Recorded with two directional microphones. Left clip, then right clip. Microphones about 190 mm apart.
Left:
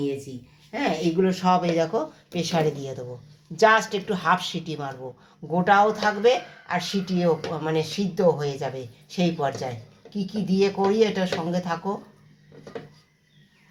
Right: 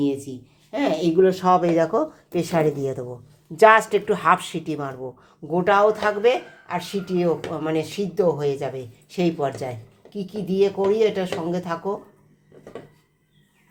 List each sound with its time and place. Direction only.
0.7 s speech: 55° right (ahead or behind); by 2.5 s 35° right (ahead or behind)
2.5 s speech: 25° right (ahead or behind)
5.5 s speech: 35° right (ahead or behind)